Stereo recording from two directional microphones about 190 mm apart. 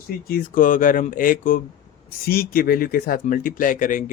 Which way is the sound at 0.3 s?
50° left (ahead or behind).